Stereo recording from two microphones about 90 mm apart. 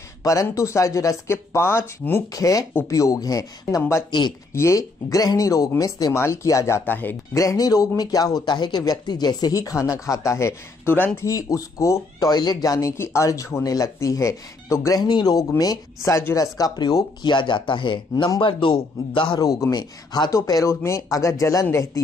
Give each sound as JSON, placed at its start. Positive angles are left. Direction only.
{"t": 0.2, "sound": "speech", "side_deg": 35}
{"t": 2.3, "sound": "speech", "side_deg": 40}
{"t": 6.1, "sound": "speech", "side_deg": 30}
{"t": 6.9, "sound": "speech", "side_deg": 20}
{"t": 7.3, "sound": "speech", "side_deg": 40}
{"t": 8.5, "sound": "speech", "side_deg": 55}
{"t": 11.1, "sound": "speech", "side_deg": 40}
{"t": 12.3, "sound": "speech", "side_deg": 50}
{"t": 15.0, "sound": "speech", "side_deg": 50}
{"t": 15.3, "sound": "a man's voice", "side_deg": 40}
{"t": 19.4, "sound": "speech", "side_deg": 40}
{"t": 20.3, "sound": "speech", "side_deg": 40}